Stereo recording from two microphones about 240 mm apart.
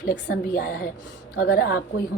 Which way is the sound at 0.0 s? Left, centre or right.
Left.